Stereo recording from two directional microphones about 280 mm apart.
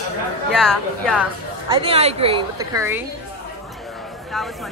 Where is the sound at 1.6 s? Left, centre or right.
Centre.